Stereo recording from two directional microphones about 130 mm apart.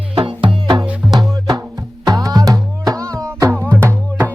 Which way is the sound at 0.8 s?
10° right (ahead or behind).